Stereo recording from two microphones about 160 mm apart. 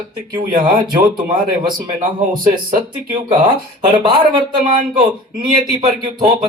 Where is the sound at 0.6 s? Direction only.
25° right (ahead or behind).